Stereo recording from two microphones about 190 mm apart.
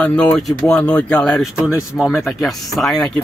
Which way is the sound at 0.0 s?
5° left (ahead or behind).